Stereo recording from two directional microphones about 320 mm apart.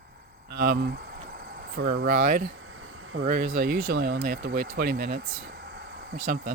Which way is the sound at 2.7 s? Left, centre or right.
Right.